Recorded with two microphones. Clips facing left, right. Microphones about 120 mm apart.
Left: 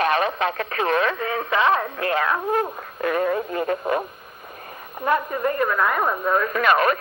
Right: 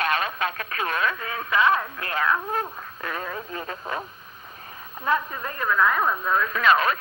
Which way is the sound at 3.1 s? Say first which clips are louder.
Left 10 dB; 50° left (ahead or behind).